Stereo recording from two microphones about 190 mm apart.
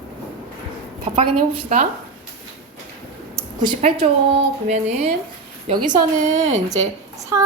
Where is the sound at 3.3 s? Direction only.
25° right (ahead or behind).